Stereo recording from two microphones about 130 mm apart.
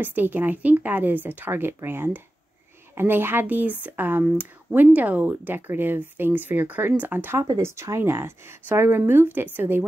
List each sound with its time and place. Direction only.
0.0 s speech: 15° right (ahead or behind)